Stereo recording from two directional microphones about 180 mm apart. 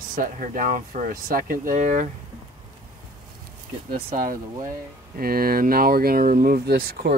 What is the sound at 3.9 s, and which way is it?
Speech, 50° right (ahead or behind).